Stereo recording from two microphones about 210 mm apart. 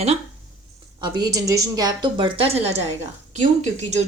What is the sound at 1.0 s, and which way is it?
A woman's voice, 20° right (ahead or behind).